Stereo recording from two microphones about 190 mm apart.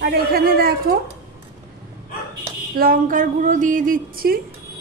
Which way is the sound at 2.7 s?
50° right (ahead or behind).